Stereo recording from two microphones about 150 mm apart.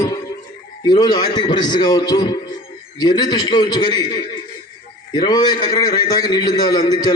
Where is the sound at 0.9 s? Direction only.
30° left (ahead or behind).